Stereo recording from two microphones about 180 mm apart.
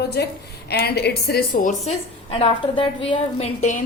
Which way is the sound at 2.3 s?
30° left (ahead or behind).